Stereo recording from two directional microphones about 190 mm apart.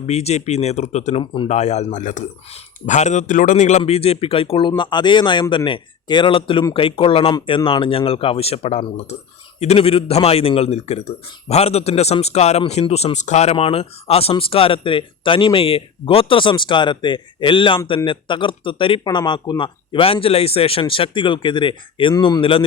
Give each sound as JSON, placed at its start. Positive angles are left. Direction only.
{"t": 0.1, "sound": "a man's voice", "side_deg": 35}